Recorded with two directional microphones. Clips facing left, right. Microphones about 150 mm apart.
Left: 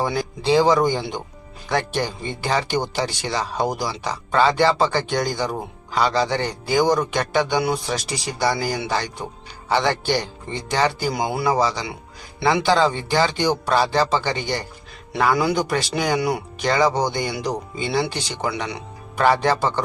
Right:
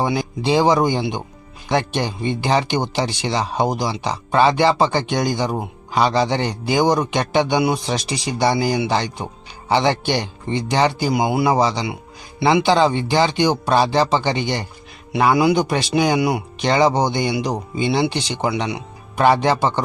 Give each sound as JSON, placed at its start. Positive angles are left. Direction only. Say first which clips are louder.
{"t": 0.0, "sound": "speech", "louder": "right 2 dB", "side_deg": -15}